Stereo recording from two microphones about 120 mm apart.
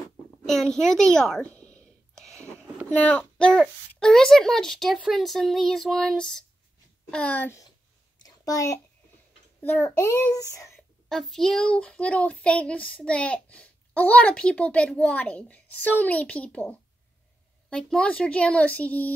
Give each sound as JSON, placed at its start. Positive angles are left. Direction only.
{"t": 0.5, "sound": "a sound", "side_deg": 5}
{"t": 2.9, "sound": "child singing", "side_deg": 10}
{"t": 4.0, "sound": "speech", "side_deg": 5}
{"t": 8.2, "sound": "a sound", "side_deg": 30}
{"t": 9.6, "sound": "a child's voice", "side_deg": 15}
{"t": 9.8, "sound": "speech", "side_deg": 25}
{"t": 10.8, "sound": "speech", "side_deg": 5}